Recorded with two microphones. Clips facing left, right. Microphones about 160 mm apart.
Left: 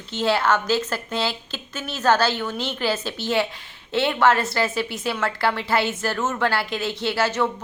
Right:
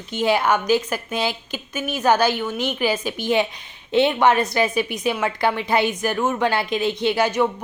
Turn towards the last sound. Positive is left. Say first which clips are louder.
# right 3 dB
turn(degrees=-15)  # may be behind; listen again after turning